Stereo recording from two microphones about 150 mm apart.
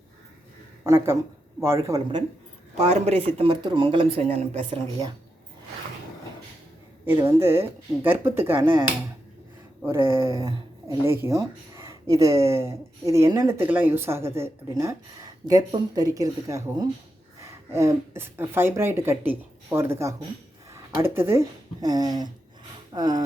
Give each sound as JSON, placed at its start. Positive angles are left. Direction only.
{"t": 0.9, "sound": "speech", "side_deg": -20}
{"t": 2.7, "sound": "speech", "side_deg": -45}
{"t": 3.3, "sound": "speech", "side_deg": -35}
{"t": 7.0, "sound": "speech", "side_deg": -15}
{"t": 9.8, "sound": "speech", "side_deg": -15}